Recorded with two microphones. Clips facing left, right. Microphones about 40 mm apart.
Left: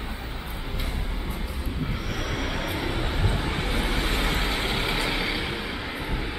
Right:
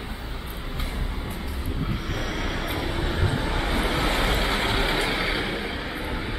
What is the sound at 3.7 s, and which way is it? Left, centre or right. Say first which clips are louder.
Vehicle: right 5 dB; right.